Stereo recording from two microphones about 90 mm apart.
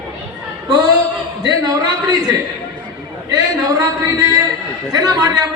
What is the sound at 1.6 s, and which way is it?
Speech, 45° right (ahead or behind).